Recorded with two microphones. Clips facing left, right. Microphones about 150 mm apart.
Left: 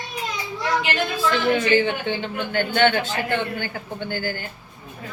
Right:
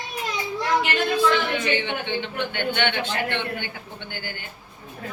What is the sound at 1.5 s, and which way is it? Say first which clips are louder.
A woman's voice: left 5 dB; 40° left (ahead or behind).